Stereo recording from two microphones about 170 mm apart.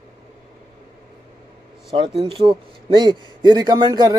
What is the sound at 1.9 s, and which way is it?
Speech, 35° right (ahead or behind).